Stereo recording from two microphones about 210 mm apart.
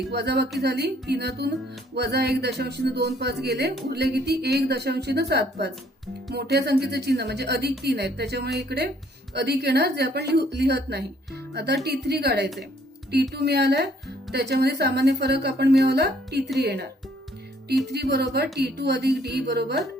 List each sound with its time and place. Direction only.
0.1 s speech: 50° right (ahead or behind)
17.8 s speech: 50° right (ahead or behind)